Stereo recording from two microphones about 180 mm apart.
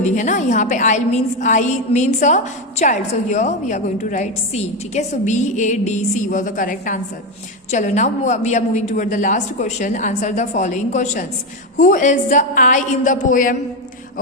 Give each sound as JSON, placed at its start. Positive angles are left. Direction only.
{"t": 0.0, "sound": "a woman's voice", "side_deg": 45}